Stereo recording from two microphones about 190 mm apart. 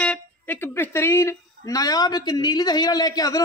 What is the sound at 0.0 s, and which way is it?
A man's voice, 10° left (ahead or behind).